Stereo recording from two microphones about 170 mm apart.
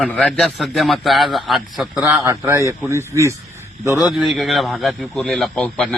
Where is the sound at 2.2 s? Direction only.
15° right (ahead or behind).